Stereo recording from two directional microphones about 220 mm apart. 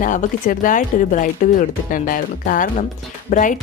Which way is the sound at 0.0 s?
35° left (ahead or behind).